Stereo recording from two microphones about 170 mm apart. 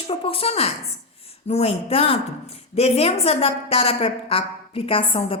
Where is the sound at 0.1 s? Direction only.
35° left (ahead or behind).